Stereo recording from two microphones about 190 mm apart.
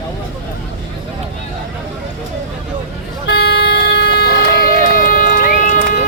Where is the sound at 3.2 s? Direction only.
60° left (ahead or behind).